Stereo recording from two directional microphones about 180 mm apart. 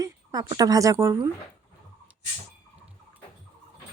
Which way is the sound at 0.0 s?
20° right (ahead or behind).